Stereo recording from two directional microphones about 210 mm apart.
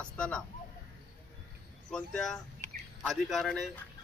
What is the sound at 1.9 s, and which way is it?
Speech, 5° left (ahead or behind).